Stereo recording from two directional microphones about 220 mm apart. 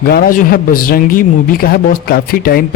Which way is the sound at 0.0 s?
40° left (ahead or behind).